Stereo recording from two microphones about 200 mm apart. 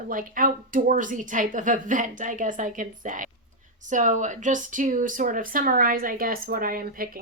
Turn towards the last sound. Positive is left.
turn(degrees=-45)  # may be behind; listen again after turning